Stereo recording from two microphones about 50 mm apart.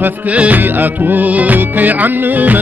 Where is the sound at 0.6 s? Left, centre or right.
Right.